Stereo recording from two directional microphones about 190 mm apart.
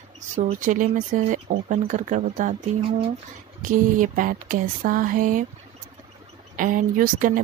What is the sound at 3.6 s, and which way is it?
Speech, 45° right (ahead or behind).